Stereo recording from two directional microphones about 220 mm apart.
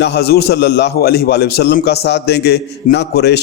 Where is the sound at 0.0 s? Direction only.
50° left (ahead or behind).